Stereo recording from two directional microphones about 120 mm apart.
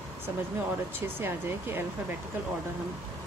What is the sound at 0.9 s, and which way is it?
Speech, 20° right (ahead or behind).